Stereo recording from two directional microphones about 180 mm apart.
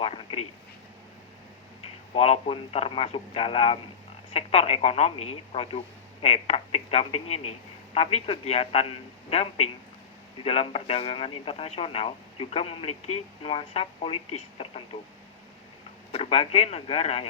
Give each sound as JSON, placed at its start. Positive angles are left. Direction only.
{"t": 0.0, "sound": "speech", "side_deg": 30}
{"t": 2.1, "sound": "speech", "side_deg": 35}
{"t": 16.1, "sound": "speech", "side_deg": 35}